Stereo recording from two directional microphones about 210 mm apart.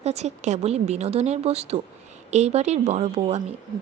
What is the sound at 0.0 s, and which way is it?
Speech, 30° right (ahead or behind).